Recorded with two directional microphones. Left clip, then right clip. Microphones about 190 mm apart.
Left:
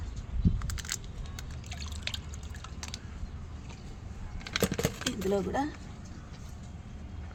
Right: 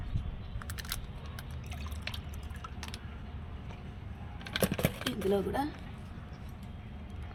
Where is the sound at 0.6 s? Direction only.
5° left (ahead or behind).